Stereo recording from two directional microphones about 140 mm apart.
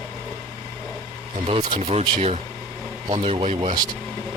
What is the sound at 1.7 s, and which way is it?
Speech, 50° right (ahead or behind).